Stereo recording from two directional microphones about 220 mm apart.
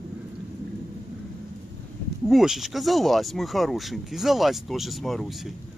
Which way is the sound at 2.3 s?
Centre (ahead or behind).